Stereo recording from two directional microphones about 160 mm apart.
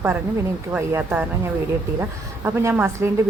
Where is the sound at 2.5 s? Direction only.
15° right (ahead or behind).